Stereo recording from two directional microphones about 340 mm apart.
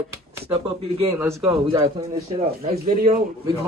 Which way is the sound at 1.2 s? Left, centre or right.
Centre.